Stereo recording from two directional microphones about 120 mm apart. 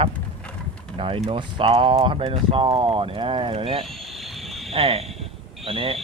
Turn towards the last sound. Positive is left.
turn(degrees=-50)  # may be behind; listen again after turning